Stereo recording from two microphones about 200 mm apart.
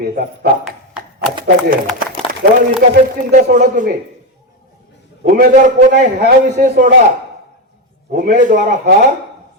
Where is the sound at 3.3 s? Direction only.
40° right (ahead or behind).